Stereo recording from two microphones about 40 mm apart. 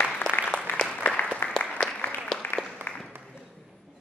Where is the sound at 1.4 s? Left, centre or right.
Left.